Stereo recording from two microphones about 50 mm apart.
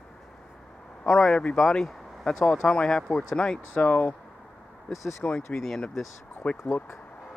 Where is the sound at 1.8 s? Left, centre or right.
Centre.